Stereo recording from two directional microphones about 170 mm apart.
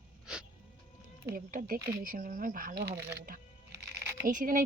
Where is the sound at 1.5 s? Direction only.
50° right (ahead or behind).